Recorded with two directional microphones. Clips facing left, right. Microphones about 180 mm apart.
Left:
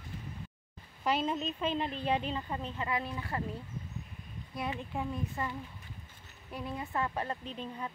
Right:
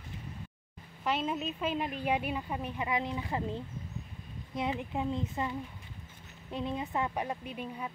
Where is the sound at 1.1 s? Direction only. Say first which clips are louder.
Left 1 dB; centre (ahead or behind).